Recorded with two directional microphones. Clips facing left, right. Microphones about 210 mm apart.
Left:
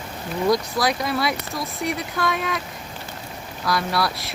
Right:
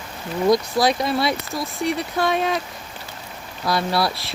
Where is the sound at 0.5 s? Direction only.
25° right (ahead or behind).